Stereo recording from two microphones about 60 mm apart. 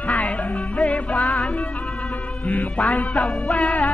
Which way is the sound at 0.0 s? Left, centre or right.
Left.